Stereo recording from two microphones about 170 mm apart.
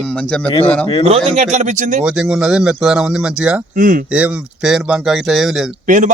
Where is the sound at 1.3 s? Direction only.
45° right (ahead or behind).